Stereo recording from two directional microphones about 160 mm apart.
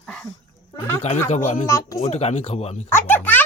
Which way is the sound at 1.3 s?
45° left (ahead or behind).